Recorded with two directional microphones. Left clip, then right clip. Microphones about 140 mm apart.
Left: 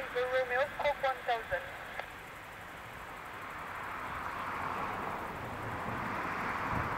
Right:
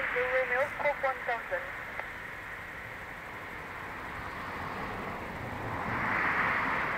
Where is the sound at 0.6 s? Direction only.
40° left (ahead or behind).